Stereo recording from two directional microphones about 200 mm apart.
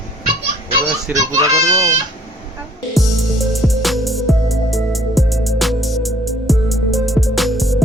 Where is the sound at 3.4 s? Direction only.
Centre (ahead or behind).